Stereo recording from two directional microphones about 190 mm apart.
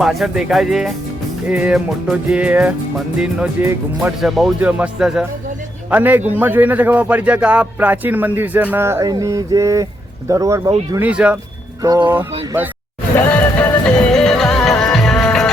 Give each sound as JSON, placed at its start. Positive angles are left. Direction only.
{"t": 0.0, "sound": "music", "side_deg": 0}
{"t": 5.9, "sound": "a man's voice", "side_deg": -10}
{"t": 13.1, "sound": "music", "side_deg": 10}